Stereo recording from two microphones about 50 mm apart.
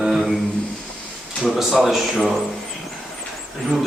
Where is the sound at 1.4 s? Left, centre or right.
Centre.